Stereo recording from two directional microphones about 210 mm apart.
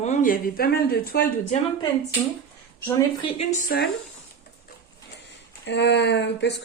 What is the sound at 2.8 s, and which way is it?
Speech, 15° left (ahead or behind).